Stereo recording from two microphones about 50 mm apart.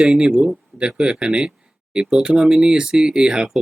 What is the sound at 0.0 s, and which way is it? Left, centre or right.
Speech, centre.